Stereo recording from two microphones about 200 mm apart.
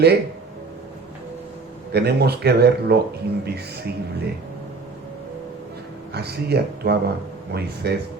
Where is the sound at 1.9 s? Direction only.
55° right (ahead or behind).